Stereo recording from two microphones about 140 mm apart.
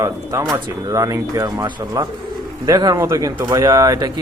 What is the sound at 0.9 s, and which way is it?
Speech, 25° right (ahead or behind).